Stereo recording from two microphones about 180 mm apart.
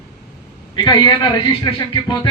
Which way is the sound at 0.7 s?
25° left (ahead or behind).